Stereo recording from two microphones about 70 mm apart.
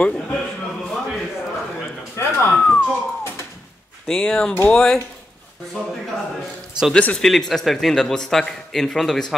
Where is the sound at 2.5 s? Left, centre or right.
Centre.